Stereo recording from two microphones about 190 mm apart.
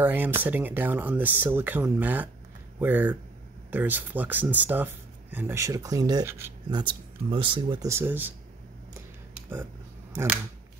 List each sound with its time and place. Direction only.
0.0 s speech: 10° right (ahead or behind)
6.7 s speech: 25° right (ahead or behind)
7.9 s speech: 10° right (ahead or behind)
10.1 s speech: 10° right (ahead or behind)